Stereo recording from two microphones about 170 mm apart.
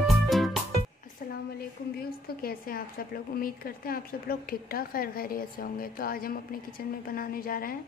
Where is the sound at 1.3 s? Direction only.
65° left (ahead or behind).